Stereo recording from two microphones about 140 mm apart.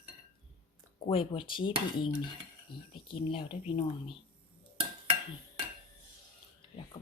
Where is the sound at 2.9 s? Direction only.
40° left (ahead or behind).